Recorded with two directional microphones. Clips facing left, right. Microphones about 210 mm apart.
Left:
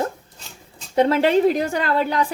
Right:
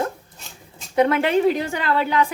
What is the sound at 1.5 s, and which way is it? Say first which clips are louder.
Speech: left 2 dB; 40° left (ahead or behind).